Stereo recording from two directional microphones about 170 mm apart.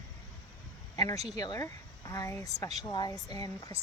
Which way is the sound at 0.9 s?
25° left (ahead or behind).